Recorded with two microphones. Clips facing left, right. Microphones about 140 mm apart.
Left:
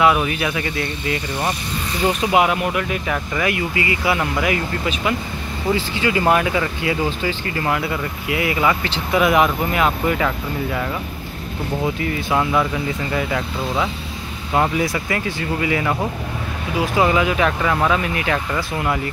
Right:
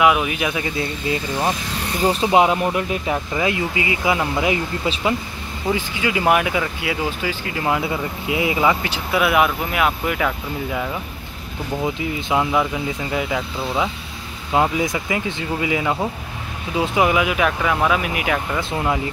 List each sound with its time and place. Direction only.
0.0 s speech: 10° right (ahead or behind)
5.8 s speech: 10° right (ahead or behind)
18.6 s speech: 20° right (ahead or behind)